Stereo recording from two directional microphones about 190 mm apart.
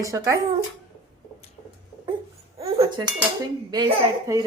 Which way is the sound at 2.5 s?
30° right (ahead or behind).